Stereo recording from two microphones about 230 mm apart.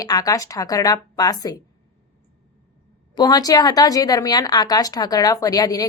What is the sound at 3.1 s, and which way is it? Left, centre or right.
Speech, centre.